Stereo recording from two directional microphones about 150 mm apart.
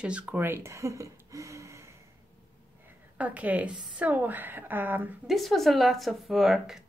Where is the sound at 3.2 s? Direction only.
10° right (ahead or behind).